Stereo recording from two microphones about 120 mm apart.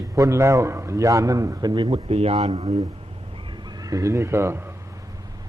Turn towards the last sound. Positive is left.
turn(degrees=-20)  # may be behind; listen again after turning